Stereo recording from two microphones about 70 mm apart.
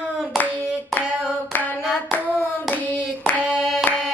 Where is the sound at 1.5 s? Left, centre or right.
Left.